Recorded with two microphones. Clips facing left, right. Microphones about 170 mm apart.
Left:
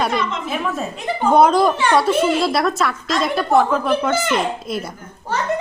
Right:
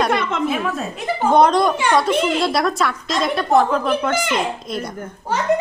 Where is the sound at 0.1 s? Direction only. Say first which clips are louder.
Right 2 dB; 55° right (ahead or behind).